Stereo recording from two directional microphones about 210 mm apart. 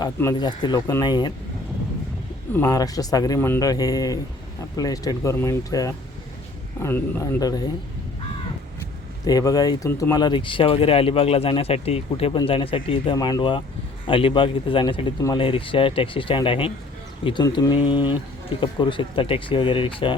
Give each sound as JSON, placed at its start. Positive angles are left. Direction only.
{"t": 0.0, "sound": "speech", "side_deg": 15}
{"t": 2.5, "sound": "speech", "side_deg": 15}
{"t": 9.2, "sound": "speech", "side_deg": 15}